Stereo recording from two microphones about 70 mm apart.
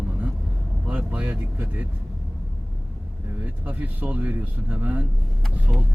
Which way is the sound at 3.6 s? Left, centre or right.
Right.